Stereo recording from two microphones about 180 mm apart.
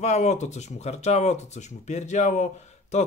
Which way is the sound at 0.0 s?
40° left (ahead or behind).